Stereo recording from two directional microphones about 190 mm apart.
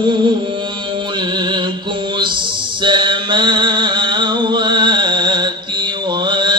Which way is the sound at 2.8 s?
25° right (ahead or behind).